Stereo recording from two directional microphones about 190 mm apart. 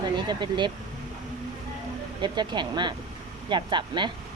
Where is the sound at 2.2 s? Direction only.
25° right (ahead or behind).